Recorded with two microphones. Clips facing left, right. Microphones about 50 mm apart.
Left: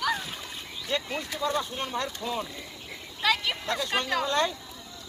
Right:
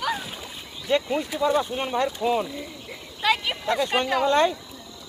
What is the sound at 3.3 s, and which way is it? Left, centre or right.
Speech, centre.